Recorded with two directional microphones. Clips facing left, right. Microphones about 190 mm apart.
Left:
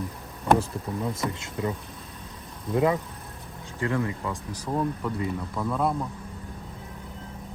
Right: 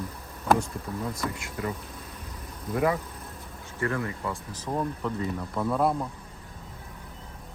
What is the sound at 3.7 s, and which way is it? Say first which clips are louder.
Speech: left 2 dB; 15° left (ahead or behind).